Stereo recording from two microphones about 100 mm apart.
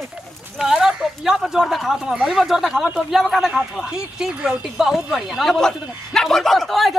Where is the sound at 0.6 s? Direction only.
5° right (ahead or behind).